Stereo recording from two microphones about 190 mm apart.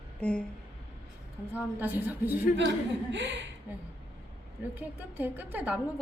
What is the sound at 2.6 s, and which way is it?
Speech, 70° right (ahead or behind).